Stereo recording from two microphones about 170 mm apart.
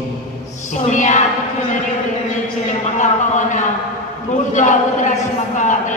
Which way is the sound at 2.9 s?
45° left (ahead or behind).